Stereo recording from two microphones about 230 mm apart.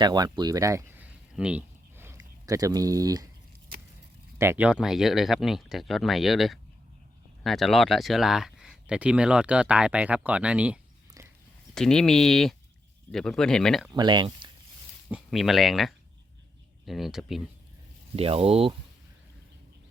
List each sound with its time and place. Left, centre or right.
0.0 s speech: centre
4.4 s speech: centre
11.7 s speech: centre
13.9 s speech: centre
15.1 s speech: centre
18.2 s speech: right